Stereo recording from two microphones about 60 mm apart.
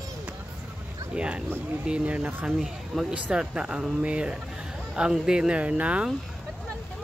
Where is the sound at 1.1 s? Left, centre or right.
Centre.